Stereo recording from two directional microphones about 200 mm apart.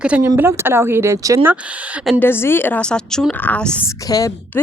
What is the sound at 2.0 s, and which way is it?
Speech, centre (ahead or behind).